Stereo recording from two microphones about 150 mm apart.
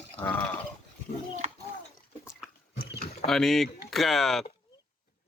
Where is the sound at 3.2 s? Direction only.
Centre (ahead or behind).